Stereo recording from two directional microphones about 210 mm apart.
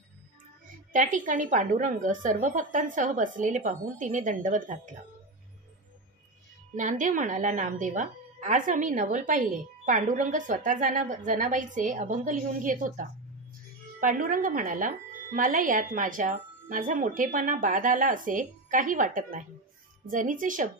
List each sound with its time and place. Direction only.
0.9 s a woman's voice: 35° right (ahead or behind)
6.7 s a woman's voice: 40° right (ahead or behind)